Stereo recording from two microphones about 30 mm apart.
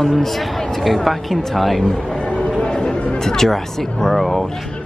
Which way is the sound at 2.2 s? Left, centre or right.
Left.